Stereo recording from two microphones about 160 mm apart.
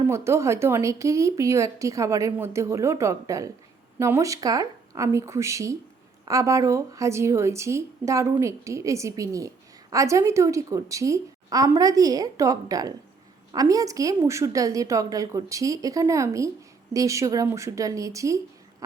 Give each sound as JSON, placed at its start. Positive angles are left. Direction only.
{"t": 0.1, "sound": "a woman's voice", "side_deg": -15}